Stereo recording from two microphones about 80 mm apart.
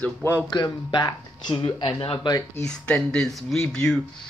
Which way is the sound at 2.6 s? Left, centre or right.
Centre.